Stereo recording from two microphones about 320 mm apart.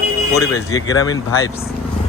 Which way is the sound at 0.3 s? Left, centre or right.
Centre.